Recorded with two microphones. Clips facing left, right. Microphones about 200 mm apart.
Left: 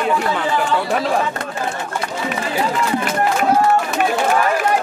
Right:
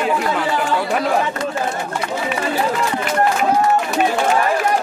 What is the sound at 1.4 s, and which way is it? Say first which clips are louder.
Speech: right 5 dB; 55° left (ahead or behind).